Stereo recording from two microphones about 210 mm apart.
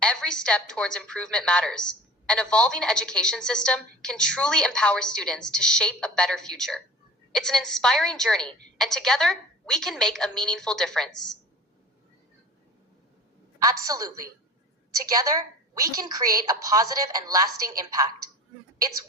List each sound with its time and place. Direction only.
0.0 s a woman's voice: 5° left (ahead or behind)
13.6 s a woman's voice: 15° right (ahead or behind)
15.1 s a woman's voice: 15° right (ahead or behind)